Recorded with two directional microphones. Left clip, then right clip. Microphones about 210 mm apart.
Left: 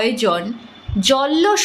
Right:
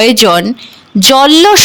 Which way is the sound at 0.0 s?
55° right (ahead or behind).